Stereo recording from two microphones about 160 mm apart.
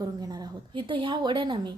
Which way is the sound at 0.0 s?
25° right (ahead or behind).